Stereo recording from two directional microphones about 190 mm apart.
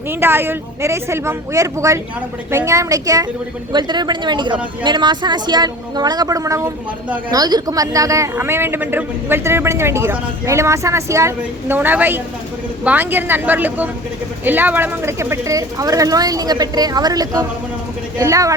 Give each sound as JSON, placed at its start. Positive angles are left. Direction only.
{"t": 0.1, "sound": "speech", "side_deg": -10}